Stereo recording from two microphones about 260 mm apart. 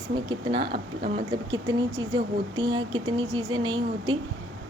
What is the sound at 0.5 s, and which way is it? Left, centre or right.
Speech, right.